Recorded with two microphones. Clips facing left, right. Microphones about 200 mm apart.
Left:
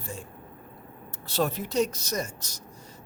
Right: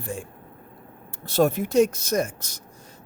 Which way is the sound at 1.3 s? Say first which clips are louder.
Right 7 dB; 50° right (ahead or behind).